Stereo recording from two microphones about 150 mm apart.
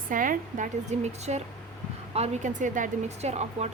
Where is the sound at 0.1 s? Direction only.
65° right (ahead or behind).